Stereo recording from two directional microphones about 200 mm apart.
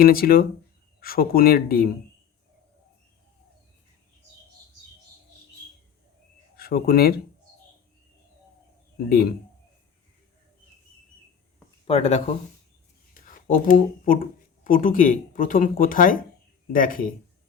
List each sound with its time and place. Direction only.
0.0 s speech: 50° left (ahead or behind)
6.6 s speech: 50° left (ahead or behind)
9.0 s speech: 50° left (ahead or behind)
11.9 s speech: 30° left (ahead or behind)
13.1 s speech: 45° left (ahead or behind)